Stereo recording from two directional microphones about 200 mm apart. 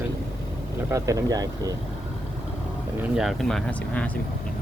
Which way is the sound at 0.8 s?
15° right (ahead or behind).